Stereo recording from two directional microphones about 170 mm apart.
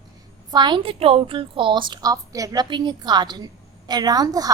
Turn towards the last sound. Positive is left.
turn(degrees=-20)  # may be behind; listen again after turning